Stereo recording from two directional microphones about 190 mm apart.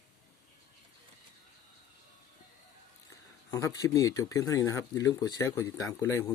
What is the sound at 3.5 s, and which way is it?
Speech, 15° left (ahead or behind).